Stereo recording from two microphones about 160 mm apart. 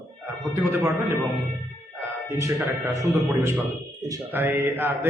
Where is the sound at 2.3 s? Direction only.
15° right (ahead or behind).